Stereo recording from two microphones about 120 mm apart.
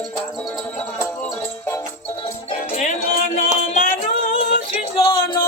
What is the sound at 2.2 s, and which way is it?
Music, 70° left (ahead or behind).